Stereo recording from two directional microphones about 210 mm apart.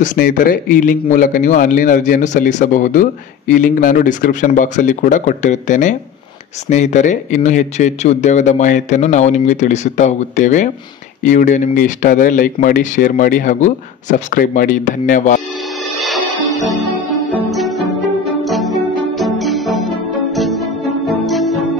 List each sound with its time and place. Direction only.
0.0 s speech: 40° left (ahead or behind)
17.4 s music: centre (ahead or behind)
21.3 s music: centre (ahead or behind)